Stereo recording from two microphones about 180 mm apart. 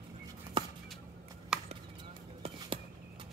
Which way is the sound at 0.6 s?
25° right (ahead or behind).